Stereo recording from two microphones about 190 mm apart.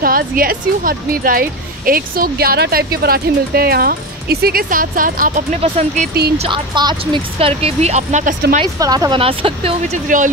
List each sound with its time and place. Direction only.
0.0 s speech: 50° right (ahead or behind)
8.7 s speech: 20° right (ahead or behind)
10.0 s speech: 45° right (ahead or behind)